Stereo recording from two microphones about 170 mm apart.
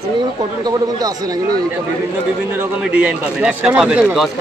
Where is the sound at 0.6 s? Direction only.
20° right (ahead or behind).